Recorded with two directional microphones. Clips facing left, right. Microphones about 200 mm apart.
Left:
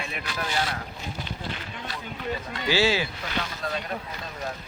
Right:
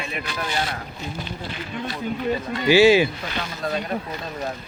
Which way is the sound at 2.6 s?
15° right (ahead or behind).